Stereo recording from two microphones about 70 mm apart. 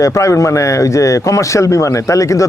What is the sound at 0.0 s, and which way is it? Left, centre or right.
A man's voice, left.